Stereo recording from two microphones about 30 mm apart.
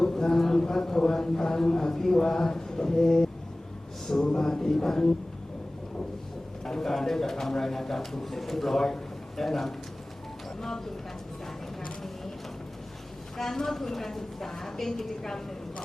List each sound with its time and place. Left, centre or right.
0.0 s a sound: left
0.7 s speech: left
6.7 s speech: centre
13.3 s speech: centre